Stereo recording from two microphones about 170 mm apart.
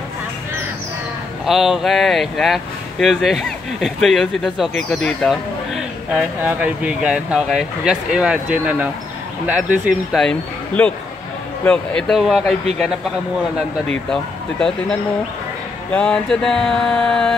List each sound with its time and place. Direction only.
1.4 s speech: centre (ahead or behind)
10.2 s speech: 5° left (ahead or behind)
14.1 s speech: 5° left (ahead or behind)